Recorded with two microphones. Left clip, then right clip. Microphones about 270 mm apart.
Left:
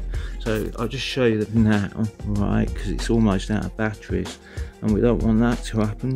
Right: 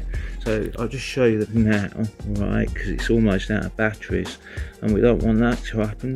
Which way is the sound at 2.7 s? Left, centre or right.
Left.